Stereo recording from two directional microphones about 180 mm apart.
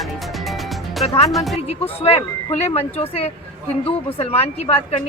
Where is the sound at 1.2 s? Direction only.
Centre (ahead or behind).